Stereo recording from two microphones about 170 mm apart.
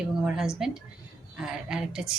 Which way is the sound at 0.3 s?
5° right (ahead or behind).